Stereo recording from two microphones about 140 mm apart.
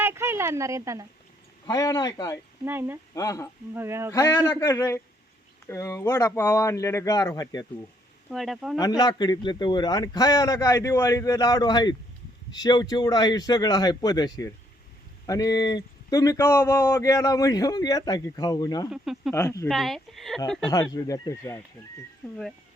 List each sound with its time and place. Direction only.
0.0 s a sound: 20° right (ahead or behind)
1.6 s speech: 25° left (ahead or behind)
2.6 s speech: 15° right (ahead or behind)
3.2 s speech: 25° left (ahead or behind)
3.8 s a sound: 20° right (ahead or behind)
4.1 s a man's voice: 20° left (ahead or behind)
8.3 s speech: centre (ahead or behind)
8.8 s speech: 30° left (ahead or behind)
18.9 s speech: 5° right (ahead or behind)
19.3 s speech: 20° left (ahead or behind)
19.6 s speech: centre (ahead or behind)
20.7 s speech: 30° left (ahead or behind)
22.2 s speech: 5° left (ahead or behind)